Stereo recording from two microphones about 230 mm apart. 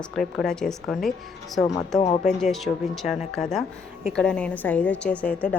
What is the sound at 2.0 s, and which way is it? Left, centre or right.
Speech, left.